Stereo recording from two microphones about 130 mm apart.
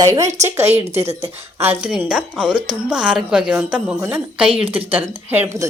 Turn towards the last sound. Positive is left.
turn(degrees=-20)  # may be behind; listen again after turning